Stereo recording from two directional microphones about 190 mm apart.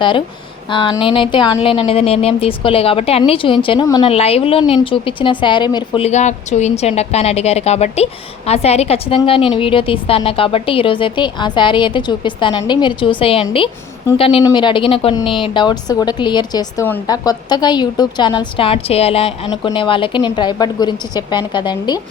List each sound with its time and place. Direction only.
0.7 s a woman's voice: 25° left (ahead or behind)